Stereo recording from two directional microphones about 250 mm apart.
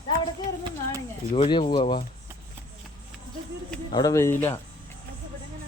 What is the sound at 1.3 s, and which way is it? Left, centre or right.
Speech, left.